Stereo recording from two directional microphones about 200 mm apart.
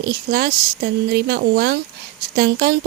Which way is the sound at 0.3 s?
45° right (ahead or behind).